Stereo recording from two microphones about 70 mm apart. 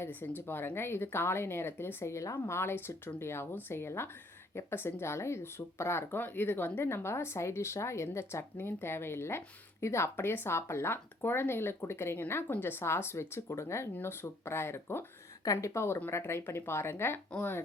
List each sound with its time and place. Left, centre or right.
0.0 s speech: left
2.6 s speech: left